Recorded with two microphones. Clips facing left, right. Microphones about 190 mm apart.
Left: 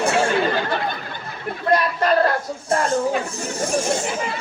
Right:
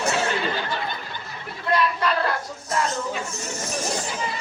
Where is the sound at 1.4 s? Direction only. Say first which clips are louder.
Left 3 dB; 45° left (ahead or behind).